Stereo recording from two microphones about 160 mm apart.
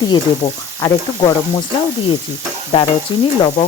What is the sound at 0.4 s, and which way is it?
Speech, 45° left (ahead or behind).